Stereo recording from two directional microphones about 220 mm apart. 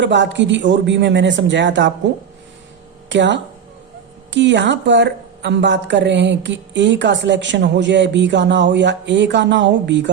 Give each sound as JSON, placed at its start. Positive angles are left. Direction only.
{"t": 0.0, "sound": "a man's voice", "side_deg": -55}
{"t": 3.1, "sound": "a man's voice", "side_deg": -55}